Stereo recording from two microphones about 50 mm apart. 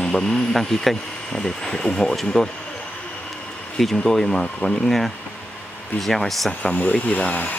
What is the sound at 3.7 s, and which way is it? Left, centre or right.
Speech, centre.